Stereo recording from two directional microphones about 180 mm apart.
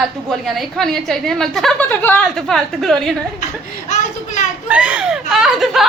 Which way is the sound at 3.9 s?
40° left (ahead or behind).